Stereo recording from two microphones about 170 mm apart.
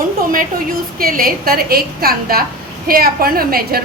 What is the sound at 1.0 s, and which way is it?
A woman's voice, 60° right (ahead or behind).